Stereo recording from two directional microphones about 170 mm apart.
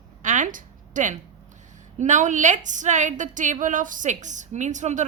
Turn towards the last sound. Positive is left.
turn(degrees=-45)  # may be behind; listen again after turning